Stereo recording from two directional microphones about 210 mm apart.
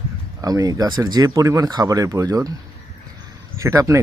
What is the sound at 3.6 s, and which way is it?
Speech, 15° right (ahead or behind).